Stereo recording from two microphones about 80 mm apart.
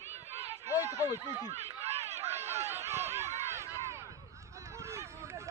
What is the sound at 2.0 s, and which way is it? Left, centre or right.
Run, right.